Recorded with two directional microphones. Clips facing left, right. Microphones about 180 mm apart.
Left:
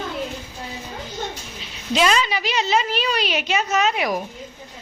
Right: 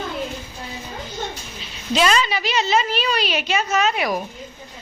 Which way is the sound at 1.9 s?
10° left (ahead or behind).